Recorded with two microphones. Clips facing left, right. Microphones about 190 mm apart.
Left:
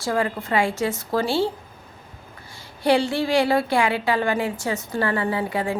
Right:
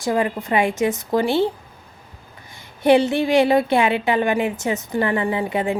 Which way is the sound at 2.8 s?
20° right (ahead or behind).